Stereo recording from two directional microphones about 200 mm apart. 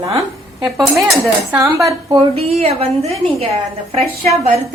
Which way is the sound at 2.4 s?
30° right (ahead or behind).